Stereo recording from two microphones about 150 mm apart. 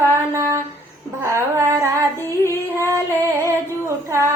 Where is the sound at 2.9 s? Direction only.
20° right (ahead or behind).